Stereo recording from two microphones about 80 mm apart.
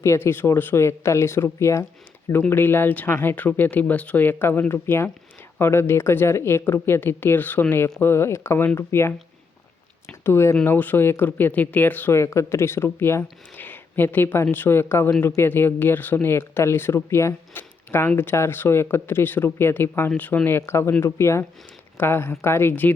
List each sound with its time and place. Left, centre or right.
0.0 s speech: left
2.5 s speech: left
10.2 s speech: left
12.1 s speech: left
13.7 s a sound: left
14.5 s speech: left